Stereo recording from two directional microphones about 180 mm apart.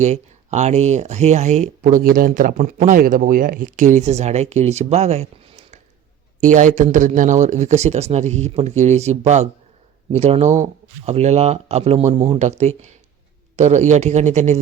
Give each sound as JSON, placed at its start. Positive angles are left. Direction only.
{"t": 0.0, "sound": "speech", "side_deg": -40}